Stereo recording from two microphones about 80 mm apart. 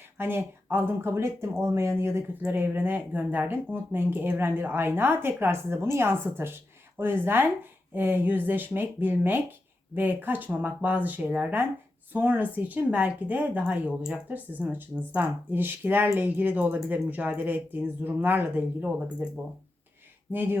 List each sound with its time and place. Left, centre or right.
0.2 s speech: right
18.9 s speech: centre
20.3 s speech: right